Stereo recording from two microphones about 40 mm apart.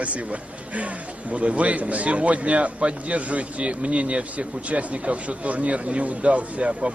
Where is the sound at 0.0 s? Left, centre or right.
Right.